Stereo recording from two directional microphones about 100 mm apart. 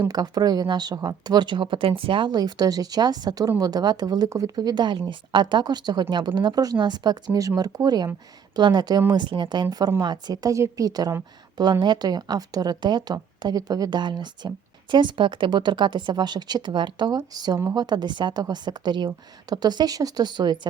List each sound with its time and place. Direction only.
0.1 s speech: 40° right (ahead or behind)